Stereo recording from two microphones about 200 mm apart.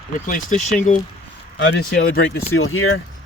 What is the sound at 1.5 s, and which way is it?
Speech, 65° left (ahead or behind).